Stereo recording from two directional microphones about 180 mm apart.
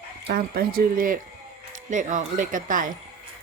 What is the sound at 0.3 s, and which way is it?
Speech, 60° right (ahead or behind).